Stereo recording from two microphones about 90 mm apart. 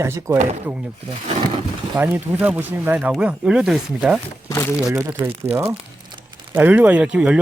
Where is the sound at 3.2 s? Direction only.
10° right (ahead or behind).